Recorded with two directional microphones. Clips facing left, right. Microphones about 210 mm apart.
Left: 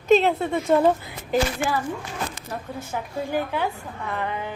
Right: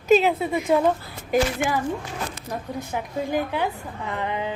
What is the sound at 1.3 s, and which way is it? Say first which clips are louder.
A woman's voice: right 1 dB; 15° right (ahead or behind).